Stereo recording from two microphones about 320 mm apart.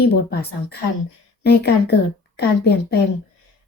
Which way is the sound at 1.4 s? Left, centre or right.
Left.